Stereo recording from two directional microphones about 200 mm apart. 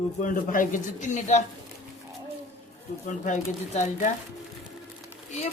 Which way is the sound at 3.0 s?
40° left (ahead or behind).